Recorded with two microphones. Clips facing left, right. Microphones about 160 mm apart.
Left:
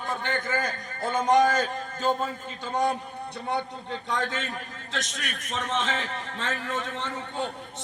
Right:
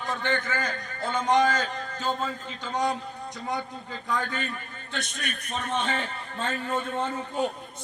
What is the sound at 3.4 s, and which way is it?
A man's voice, 70° left (ahead or behind).